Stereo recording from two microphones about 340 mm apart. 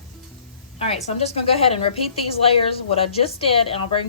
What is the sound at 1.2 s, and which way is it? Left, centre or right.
A woman's voice, centre.